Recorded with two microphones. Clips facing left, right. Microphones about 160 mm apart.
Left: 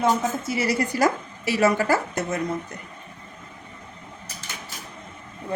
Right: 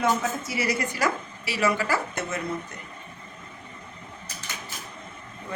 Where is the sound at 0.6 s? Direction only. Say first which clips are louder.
Left 4 dB; 35° left (ahead or behind).